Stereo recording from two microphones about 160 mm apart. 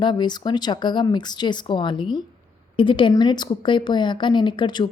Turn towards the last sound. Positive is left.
turn(degrees=30)  # may be behind; listen again after turning